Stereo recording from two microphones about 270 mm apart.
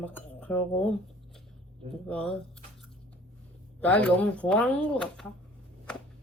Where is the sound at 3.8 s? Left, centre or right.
Centre.